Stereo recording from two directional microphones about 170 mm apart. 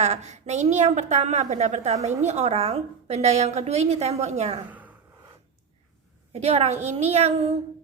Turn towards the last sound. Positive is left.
turn(degrees=-40)  # may be behind; listen again after turning